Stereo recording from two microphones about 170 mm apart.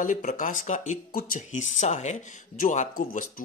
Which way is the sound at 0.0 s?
45° left (ahead or behind).